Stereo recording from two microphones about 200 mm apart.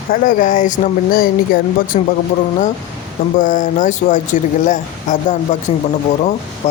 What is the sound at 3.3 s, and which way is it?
Speech, 40° left (ahead or behind).